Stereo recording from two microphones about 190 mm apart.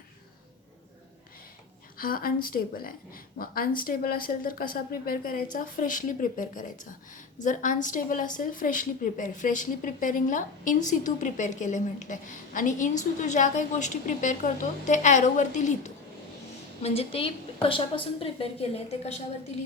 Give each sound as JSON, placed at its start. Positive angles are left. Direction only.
{"t": 2.0, "sound": "a woman's voice", "side_deg": 50}